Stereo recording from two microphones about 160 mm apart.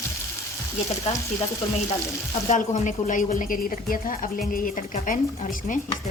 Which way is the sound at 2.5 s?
50° left (ahead or behind).